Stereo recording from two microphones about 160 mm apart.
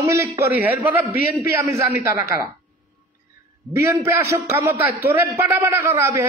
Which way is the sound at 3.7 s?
20° right (ahead or behind).